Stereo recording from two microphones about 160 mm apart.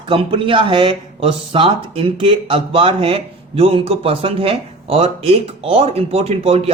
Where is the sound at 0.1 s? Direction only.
30° right (ahead or behind).